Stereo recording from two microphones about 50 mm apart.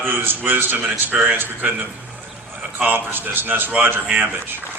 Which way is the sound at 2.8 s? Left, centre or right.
Right.